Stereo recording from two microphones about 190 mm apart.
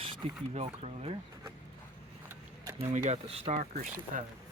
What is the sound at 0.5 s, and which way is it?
Speech, 30° right (ahead or behind).